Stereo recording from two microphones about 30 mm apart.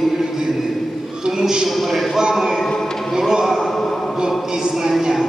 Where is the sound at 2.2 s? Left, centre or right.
Centre.